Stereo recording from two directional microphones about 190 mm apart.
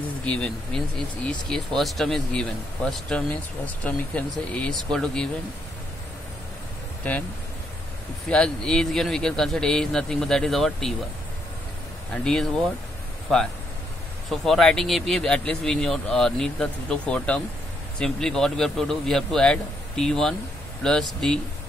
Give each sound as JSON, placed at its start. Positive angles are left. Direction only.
{"t": 0.2, "sound": "speech", "side_deg": 5}
{"t": 8.3, "sound": "speech", "side_deg": 5}
{"t": 12.1, "sound": "speech", "side_deg": 5}
{"t": 14.3, "sound": "speech", "side_deg": 0}